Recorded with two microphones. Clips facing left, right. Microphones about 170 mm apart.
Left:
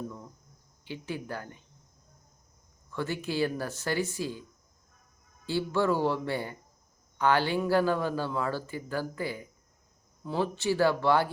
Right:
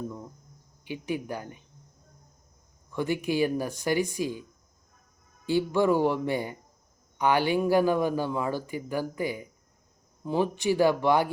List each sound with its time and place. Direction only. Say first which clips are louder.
0.9 s speech: right 4 dB; 15° right (ahead or behind)
2.9 s speech: right 5 dB; 15° right (ahead or behind)
5.5 s speech: right 4 dB; 15° right (ahead or behind)